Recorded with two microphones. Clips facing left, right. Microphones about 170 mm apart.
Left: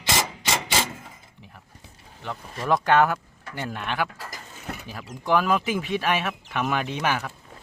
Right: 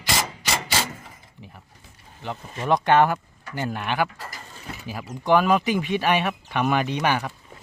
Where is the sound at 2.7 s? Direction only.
Centre (ahead or behind).